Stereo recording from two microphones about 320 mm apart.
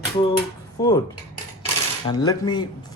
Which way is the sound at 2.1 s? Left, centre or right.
Centre.